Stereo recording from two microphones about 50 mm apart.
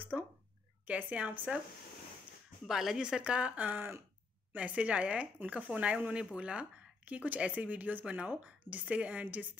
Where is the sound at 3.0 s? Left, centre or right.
Centre.